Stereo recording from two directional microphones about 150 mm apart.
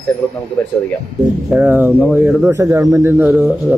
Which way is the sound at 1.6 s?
10° right (ahead or behind).